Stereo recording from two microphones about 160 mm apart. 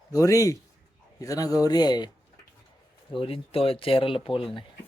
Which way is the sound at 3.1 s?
35° left (ahead or behind).